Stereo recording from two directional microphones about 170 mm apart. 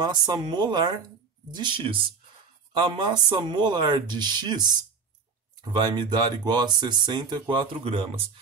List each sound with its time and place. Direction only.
0.0 s speech: 25° right (ahead or behind)